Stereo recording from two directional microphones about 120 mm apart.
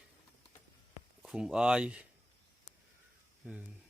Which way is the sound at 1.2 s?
Centre (ahead or behind).